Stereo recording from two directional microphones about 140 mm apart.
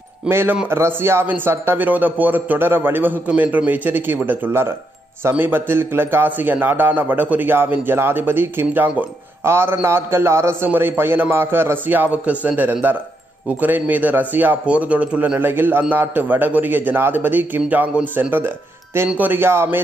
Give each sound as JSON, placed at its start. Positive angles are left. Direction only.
{"t": 0.3, "sound": "a man's voice", "side_deg": -15}